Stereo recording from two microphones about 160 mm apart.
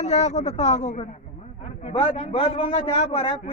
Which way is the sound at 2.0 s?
35° left (ahead or behind).